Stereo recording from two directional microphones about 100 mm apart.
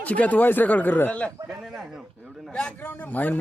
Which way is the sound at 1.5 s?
5° right (ahead or behind).